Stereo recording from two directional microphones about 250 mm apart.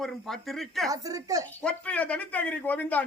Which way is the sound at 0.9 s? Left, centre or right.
Centre.